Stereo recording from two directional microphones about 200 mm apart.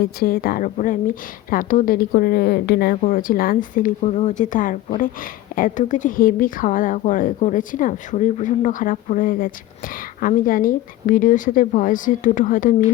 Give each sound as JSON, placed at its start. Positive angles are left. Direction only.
{"t": 0.0, "sound": "a woman's voice", "side_deg": 50}